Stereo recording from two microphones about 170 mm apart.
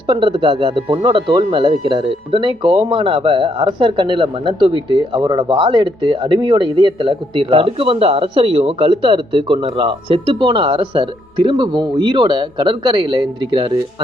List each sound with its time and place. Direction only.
0.1 s speech: 30° right (ahead or behind)